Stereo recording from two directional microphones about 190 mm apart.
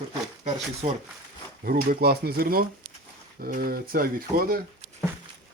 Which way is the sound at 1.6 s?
50° right (ahead or behind).